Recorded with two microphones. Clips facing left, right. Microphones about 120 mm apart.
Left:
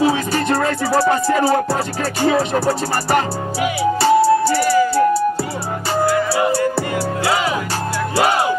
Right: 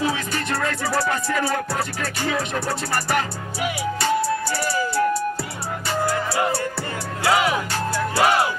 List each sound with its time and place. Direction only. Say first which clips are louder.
0.0 s music: left 8 dB; 35° left (ahead or behind)